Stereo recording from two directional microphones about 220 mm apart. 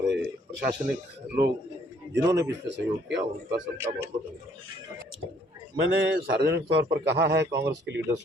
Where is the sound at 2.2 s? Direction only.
15° right (ahead or behind).